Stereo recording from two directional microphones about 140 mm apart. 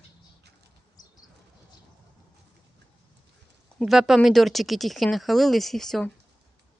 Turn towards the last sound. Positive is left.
turn(degrees=5)  # may be behind; listen again after turning